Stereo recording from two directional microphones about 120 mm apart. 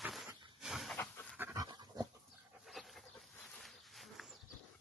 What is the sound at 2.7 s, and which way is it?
Dog, centre (ahead or behind).